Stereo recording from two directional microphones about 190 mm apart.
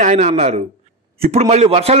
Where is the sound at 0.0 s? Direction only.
35° right (ahead or behind).